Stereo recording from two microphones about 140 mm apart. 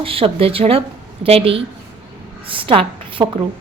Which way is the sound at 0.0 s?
40° right (ahead or behind).